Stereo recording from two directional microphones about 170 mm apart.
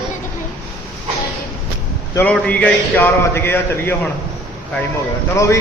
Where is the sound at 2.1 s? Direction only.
10° left (ahead or behind).